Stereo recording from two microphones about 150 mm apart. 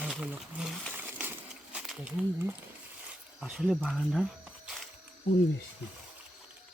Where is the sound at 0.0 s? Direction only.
5° right (ahead or behind).